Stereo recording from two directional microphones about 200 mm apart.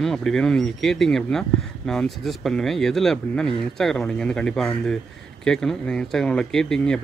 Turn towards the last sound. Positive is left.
turn(degrees=5)  # may be behind; listen again after turning